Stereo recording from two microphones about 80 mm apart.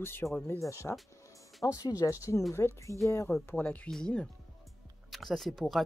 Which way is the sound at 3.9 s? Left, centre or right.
Centre.